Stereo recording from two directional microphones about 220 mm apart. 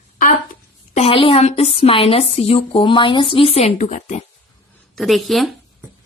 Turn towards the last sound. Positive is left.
turn(degrees=0)  # may be behind; listen again after turning